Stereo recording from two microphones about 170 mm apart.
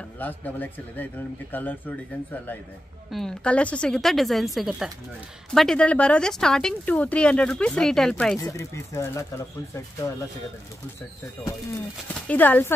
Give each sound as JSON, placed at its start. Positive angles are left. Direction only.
{"t": 0.2, "sound": "speech", "side_deg": 10}
{"t": 3.1, "sound": "a woman's voice", "side_deg": 5}
{"t": 8.4, "sound": "speech", "side_deg": 20}
{"t": 12.1, "sound": "speech", "side_deg": 10}